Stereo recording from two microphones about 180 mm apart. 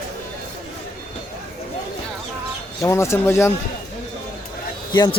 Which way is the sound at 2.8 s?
15° left (ahead or behind).